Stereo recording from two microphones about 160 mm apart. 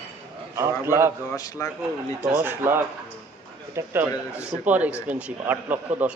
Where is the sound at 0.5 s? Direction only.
15° right (ahead or behind).